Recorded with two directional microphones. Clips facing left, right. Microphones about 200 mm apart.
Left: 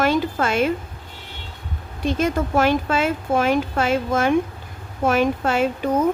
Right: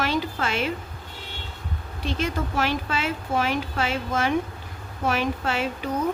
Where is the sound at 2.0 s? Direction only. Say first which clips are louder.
Left 6 dB; 45° left (ahead or behind).